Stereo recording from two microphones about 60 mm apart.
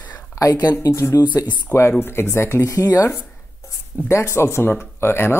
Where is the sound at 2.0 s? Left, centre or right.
Left.